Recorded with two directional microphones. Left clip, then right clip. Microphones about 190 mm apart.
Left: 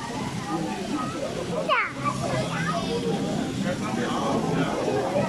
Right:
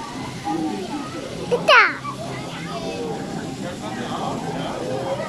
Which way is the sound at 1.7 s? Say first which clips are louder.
Right 12 dB; 55° right (ahead or behind).